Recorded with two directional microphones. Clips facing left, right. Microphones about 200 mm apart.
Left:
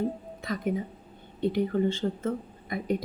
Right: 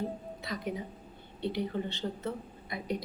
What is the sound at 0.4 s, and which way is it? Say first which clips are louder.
A woman's voice: left 7 dB; 50° left (ahead or behind).